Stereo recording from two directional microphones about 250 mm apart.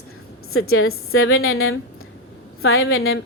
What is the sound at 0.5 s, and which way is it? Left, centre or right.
A woman's voice, left.